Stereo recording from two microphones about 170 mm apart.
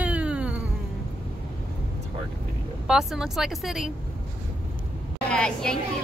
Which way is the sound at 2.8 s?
5° right (ahead or behind).